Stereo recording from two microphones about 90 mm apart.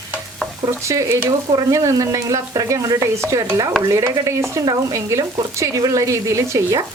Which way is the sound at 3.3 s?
45° right (ahead or behind).